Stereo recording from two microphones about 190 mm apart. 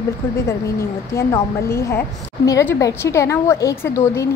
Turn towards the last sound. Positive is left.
turn(degrees=15)  # may be behind; listen again after turning